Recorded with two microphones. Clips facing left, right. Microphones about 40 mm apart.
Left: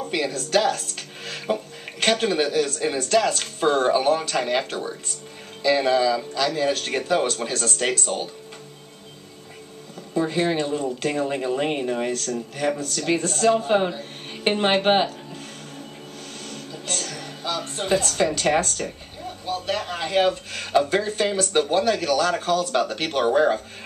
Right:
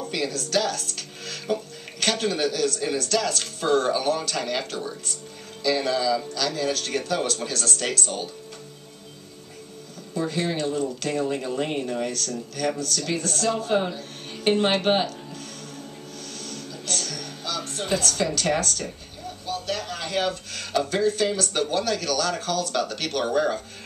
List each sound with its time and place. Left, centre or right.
0.0 s speech: centre
10.1 s speech: centre
16.4 s a woman's voice: centre